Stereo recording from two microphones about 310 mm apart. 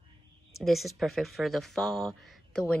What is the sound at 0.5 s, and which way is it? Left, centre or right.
Speech, centre.